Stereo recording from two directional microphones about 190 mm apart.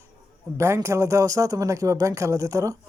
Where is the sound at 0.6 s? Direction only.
15° right (ahead or behind).